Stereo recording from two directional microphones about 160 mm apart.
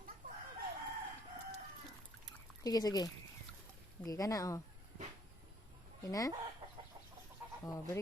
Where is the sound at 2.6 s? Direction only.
25° left (ahead or behind).